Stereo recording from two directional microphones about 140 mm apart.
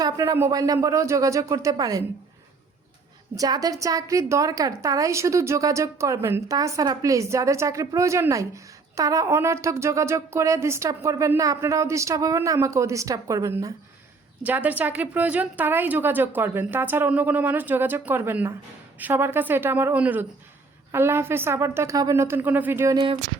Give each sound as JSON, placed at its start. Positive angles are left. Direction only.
{"t": 0.0, "sound": "a woman's voice", "side_deg": -25}
{"t": 3.3, "sound": "a woman's voice", "side_deg": -25}
{"t": 14.4, "sound": "a woman's voice", "side_deg": -10}